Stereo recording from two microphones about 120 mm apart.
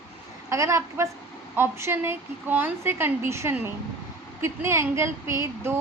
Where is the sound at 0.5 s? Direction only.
25° right (ahead or behind).